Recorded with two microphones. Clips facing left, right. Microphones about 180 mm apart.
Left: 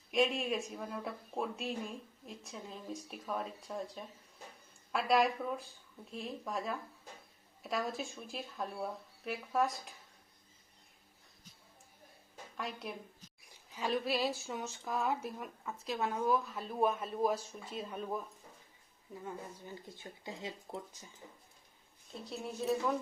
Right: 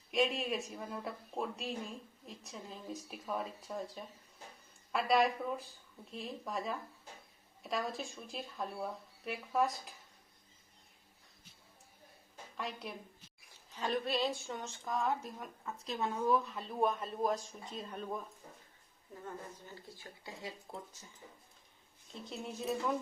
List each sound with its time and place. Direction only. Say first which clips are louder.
0.1 s a woman's voice: left 1 dB; centre (ahead or behind)
12.5 s a woman's voice: left 1 dB; centre (ahead or behind)
19.2 s speech: left 1 dB; 15° left (ahead or behind)
22.3 s a woman's voice: left 2 dB; centre (ahead or behind)